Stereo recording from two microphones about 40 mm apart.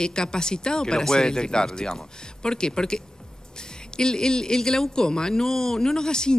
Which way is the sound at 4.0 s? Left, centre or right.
Centre.